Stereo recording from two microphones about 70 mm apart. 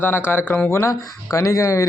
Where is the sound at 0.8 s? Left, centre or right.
Left.